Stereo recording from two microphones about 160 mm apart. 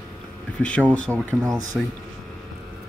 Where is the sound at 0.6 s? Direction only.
5° left (ahead or behind).